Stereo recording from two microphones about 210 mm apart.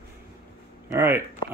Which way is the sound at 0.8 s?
10° right (ahead or behind).